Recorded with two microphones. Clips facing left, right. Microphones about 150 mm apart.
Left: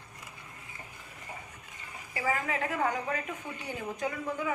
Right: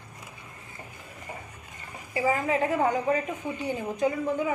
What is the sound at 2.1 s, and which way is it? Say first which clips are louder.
A woman's voice: right 6 dB; 25° right (ahead or behind).